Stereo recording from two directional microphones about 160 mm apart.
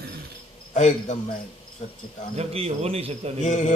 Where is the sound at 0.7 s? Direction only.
50° left (ahead or behind).